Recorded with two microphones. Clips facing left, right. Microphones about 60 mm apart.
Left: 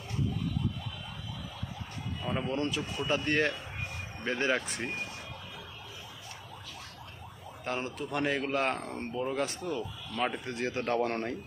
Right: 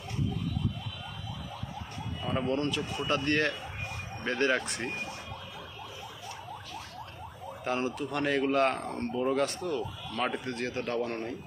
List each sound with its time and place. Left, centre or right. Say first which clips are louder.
2.2 s speech: right 2 dB; centre
7.6 s speech: right 4 dB; centre
10.7 s speech: left 4 dB; left